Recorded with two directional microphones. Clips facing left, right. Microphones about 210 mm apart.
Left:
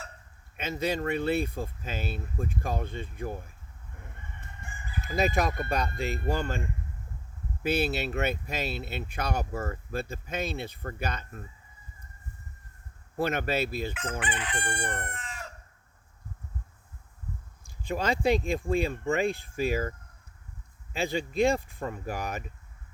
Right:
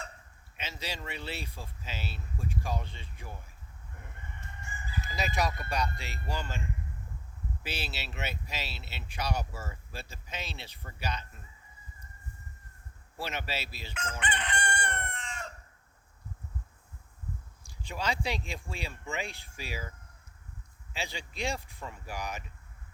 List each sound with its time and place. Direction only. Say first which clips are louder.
0.5 s speech: left 11 dB; 55° left (ahead or behind)
4.4 s fowl: right 2 dB; 55° left (ahead or behind)
7.6 s speech: left 13 dB; 55° left (ahead or behind)
13.1 s speech: left 9 dB; 55° left (ahead or behind)
14.2 s chicken: left 1 dB; 5° left (ahead or behind)
17.8 s speech: left 8 dB; 55° left (ahead or behind)
20.9 s speech: left 11 dB; 55° left (ahead or behind)